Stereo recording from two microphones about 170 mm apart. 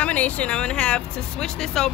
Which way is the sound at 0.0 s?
10° left (ahead or behind).